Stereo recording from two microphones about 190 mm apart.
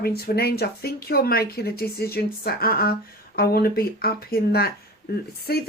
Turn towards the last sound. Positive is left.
turn(degrees=55)  # may be behind; listen again after turning